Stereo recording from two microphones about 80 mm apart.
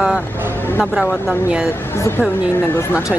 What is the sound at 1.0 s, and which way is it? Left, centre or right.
A woman's voice, left.